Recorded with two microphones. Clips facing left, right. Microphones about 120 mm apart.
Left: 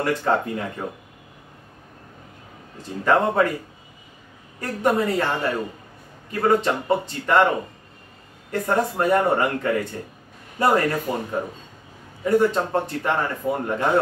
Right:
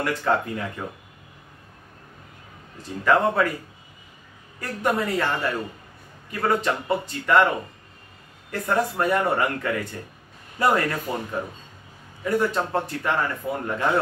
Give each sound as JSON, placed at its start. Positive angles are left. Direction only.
{"t": 0.0, "sound": "speech", "side_deg": 30}
{"t": 3.0, "sound": "speech", "side_deg": 25}
{"t": 4.8, "sound": "speech", "side_deg": 25}
{"t": 12.5, "sound": "speech", "side_deg": 25}